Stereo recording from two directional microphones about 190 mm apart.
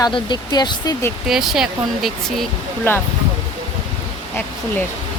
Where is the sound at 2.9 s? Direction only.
10° left (ahead or behind).